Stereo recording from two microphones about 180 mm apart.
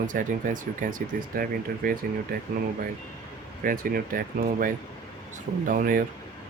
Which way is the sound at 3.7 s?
55° right (ahead or behind).